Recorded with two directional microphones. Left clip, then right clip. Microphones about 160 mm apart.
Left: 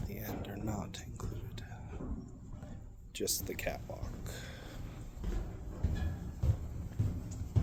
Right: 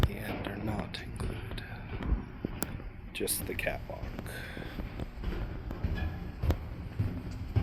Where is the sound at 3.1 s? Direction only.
20° left (ahead or behind).